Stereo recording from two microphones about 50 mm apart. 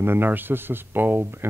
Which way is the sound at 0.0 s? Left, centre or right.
Right.